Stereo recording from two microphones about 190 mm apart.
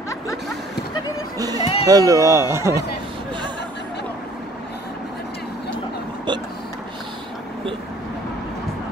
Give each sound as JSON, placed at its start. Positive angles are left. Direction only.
{"t": 1.4, "sound": "music", "side_deg": -20}
{"t": 1.9, "sound": "speech", "side_deg": -20}